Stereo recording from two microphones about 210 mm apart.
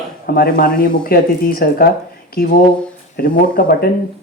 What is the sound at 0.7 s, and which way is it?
Speech, 5° left (ahead or behind).